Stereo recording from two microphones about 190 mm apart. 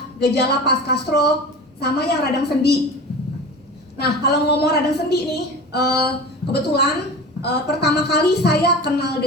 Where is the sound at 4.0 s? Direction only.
60° left (ahead or behind).